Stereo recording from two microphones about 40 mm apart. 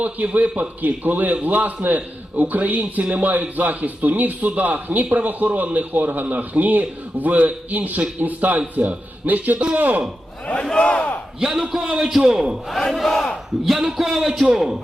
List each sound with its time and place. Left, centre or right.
0.3 s a man's voice: right
10.4 s speech: left
11.3 s a man's voice: centre
12.2 s a man's voice: right
13.0 s battle cry: centre
13.9 s a man's voice: centre